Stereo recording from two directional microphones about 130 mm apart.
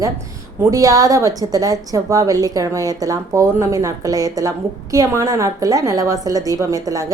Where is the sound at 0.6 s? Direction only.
25° right (ahead or behind).